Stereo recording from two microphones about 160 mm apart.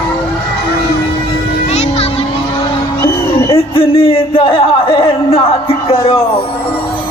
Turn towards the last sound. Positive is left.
turn(degrees=35)  # may be behind; listen again after turning